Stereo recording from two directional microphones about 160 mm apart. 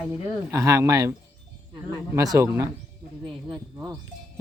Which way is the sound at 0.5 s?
20° right (ahead or behind).